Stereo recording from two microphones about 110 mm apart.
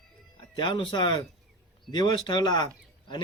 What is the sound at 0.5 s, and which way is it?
A man's voice, 45° left (ahead or behind).